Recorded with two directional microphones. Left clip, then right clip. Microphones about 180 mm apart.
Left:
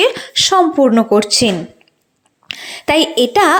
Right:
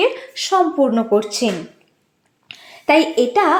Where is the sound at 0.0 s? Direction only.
30° left (ahead or behind).